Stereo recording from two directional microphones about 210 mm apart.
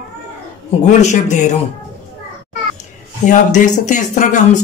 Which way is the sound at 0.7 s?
30° left (ahead or behind).